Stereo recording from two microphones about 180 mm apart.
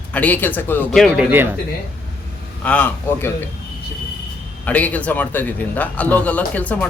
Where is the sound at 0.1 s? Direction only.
10° left (ahead or behind); by 1.5 s 10° right (ahead or behind).